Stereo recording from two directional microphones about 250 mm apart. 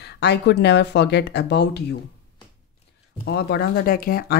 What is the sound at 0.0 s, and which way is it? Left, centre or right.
Speech, left.